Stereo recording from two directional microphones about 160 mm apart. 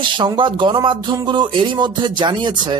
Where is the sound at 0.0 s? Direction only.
30° right (ahead or behind).